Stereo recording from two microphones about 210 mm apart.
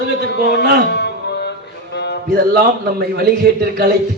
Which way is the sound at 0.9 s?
50° left (ahead or behind).